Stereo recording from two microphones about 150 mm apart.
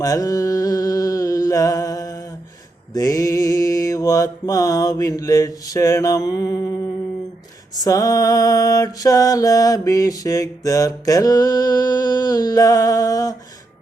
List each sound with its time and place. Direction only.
0.0 s mantra: 25° left (ahead or behind)
7.9 s mantra: 25° left (ahead or behind)